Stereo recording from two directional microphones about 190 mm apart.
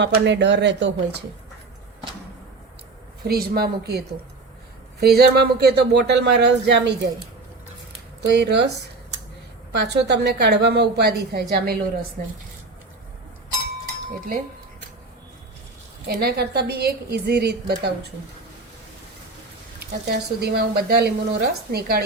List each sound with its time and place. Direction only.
0.0 s speech: 70° right (ahead or behind)
3.2 s speech: 55° right (ahead or behind)
8.2 s speech: 60° right (ahead or behind)
9.7 s speech: 60° right (ahead or behind)
16.0 s speech: 60° right (ahead or behind)
20.1 s speech: 55° right (ahead or behind)